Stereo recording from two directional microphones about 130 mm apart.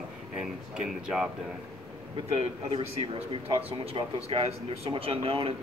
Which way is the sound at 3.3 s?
45° right (ahead or behind).